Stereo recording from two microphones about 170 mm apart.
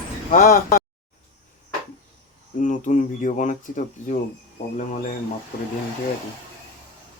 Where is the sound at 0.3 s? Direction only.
50° left (ahead or behind).